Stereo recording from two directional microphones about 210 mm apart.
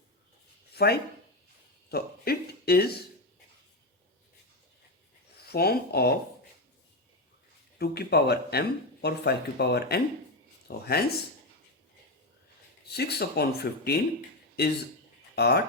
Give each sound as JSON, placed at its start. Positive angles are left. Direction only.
{"t": 0.7, "sound": "a sound", "side_deg": 50}
{"t": 1.9, "sound": "speech", "side_deg": 45}
{"t": 5.5, "sound": "speech", "side_deg": 50}
{"t": 7.8, "sound": "speech", "side_deg": 50}
{"t": 12.9, "sound": "speech", "side_deg": 50}